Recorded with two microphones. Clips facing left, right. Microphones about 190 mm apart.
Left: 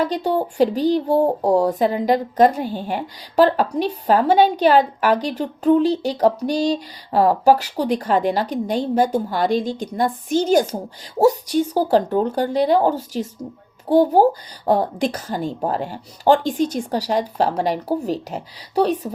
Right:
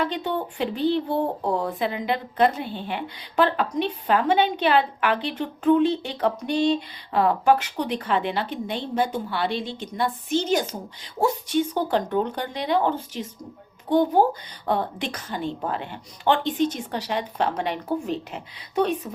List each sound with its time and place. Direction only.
0.0 s speech: 40° left (ahead or behind)